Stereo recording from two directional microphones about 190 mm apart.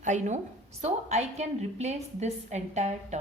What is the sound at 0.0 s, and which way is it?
A woman's voice, 40° right (ahead or behind).